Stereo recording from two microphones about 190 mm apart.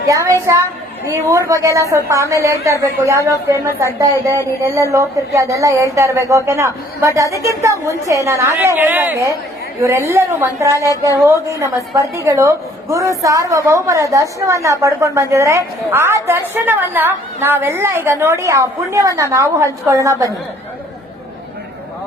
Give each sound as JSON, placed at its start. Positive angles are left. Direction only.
{"t": 0.1, "sound": "a woman's voice", "side_deg": -15}